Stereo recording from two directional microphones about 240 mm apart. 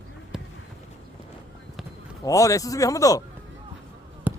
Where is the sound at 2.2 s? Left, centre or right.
Centre.